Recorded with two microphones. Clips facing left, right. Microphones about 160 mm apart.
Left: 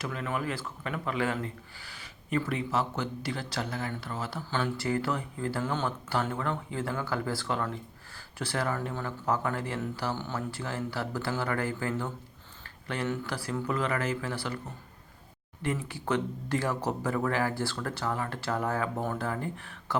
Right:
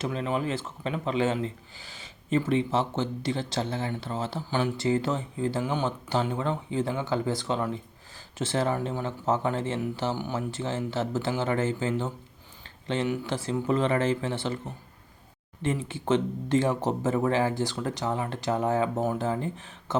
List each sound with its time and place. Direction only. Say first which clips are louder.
0.0 s speech: right 4 dB; 25° right (ahead or behind)
15.6 s speech: right 4 dB; 20° right (ahead or behind)